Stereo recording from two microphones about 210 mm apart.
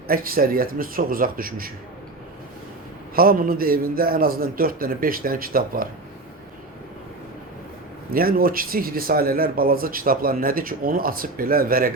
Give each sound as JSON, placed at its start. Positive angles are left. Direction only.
{"t": 0.1, "sound": "speech", "side_deg": -45}
{"t": 3.2, "sound": "speech", "side_deg": -45}
{"t": 8.1, "sound": "speech", "side_deg": -45}